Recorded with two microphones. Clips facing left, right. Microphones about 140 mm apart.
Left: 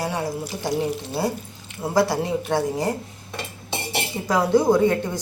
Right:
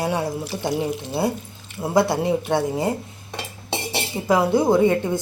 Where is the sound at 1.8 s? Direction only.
20° right (ahead or behind).